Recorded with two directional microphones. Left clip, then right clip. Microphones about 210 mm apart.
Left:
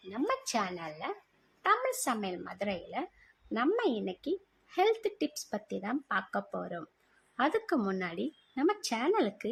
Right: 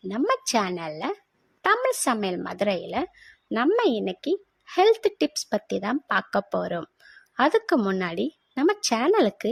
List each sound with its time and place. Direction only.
0.1 s a woman's voice: 40° right (ahead or behind)